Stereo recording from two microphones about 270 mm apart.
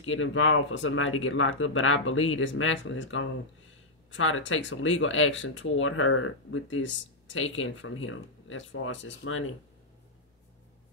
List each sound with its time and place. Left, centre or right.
0.0 s speech: left